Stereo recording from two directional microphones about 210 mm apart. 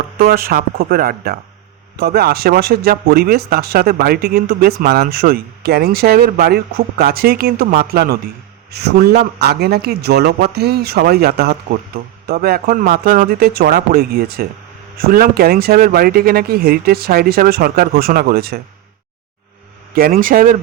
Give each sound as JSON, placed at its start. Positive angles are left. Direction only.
{"t": 0.2, "sound": "speech", "side_deg": -45}
{"t": 19.9, "sound": "speech", "side_deg": -45}